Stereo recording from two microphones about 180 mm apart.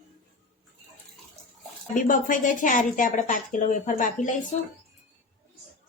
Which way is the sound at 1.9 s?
45° left (ahead or behind).